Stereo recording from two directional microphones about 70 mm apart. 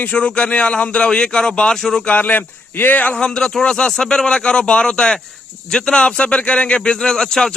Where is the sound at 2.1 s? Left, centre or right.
Left.